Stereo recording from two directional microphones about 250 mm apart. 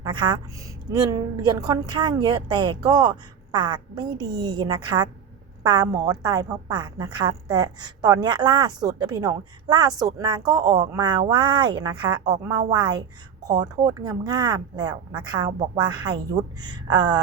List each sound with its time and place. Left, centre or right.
0.0 s a woman's voice: centre